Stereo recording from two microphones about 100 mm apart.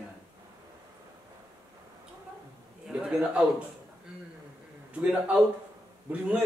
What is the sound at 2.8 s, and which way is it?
Speech, 5° right (ahead or behind).